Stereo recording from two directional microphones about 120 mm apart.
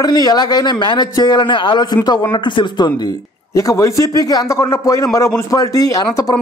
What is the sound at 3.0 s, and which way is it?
A man's voice, 30° left (ahead or behind).